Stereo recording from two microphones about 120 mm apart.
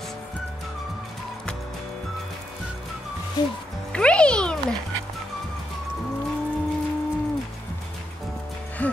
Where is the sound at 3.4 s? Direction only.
35° left (ahead or behind).